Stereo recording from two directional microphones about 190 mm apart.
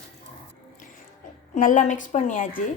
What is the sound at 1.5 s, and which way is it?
A woman's voice, 40° left (ahead or behind).